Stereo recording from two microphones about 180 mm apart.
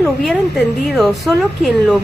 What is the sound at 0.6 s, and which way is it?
Speech, 65° left (ahead or behind).